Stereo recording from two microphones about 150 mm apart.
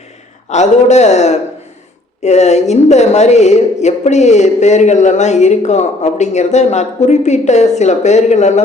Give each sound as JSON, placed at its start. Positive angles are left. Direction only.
{"t": 0.4, "sound": "a woman's voice", "side_deg": 50}